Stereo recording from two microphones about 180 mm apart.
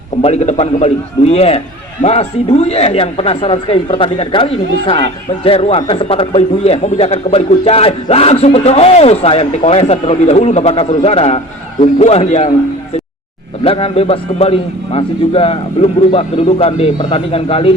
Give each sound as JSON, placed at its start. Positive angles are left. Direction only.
{"t": 0.2, "sound": "a man's voice", "side_deg": 40}
{"t": 13.7, "sound": "a man's voice", "side_deg": 30}